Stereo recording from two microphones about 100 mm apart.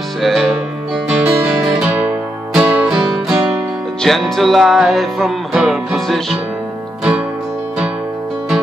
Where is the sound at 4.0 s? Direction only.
Centre (ahead or behind).